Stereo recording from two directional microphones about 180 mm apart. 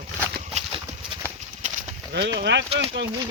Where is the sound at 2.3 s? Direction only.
75° right (ahead or behind).